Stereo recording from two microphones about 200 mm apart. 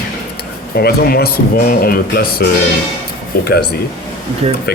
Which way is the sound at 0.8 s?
50° left (ahead or behind).